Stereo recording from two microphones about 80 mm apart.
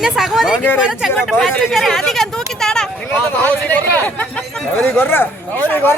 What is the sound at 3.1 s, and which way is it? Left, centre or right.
Speech, left.